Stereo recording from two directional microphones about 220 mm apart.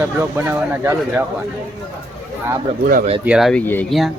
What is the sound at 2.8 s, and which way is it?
Speech, 35° right (ahead or behind).